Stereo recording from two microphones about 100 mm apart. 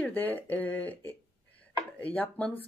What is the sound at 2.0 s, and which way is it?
Speech, 15° left (ahead or behind).